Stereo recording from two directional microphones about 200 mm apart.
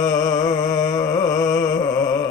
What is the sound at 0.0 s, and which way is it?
Music, 20° left (ahead or behind).